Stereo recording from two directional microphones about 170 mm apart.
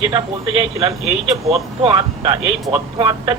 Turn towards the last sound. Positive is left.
turn(degrees=-30)  # may be behind; listen again after turning